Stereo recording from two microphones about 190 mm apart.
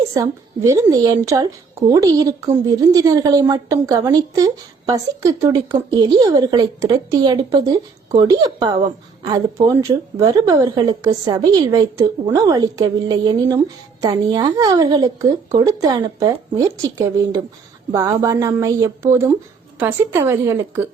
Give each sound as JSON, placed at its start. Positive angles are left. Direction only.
{"t": 0.1, "sound": "a woman's voice", "side_deg": -20}